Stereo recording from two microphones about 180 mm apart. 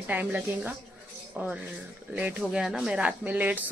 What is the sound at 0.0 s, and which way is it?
Speech, 10° right (ahead or behind).